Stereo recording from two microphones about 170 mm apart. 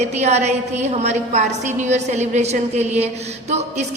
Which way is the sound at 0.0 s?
40° right (ahead or behind).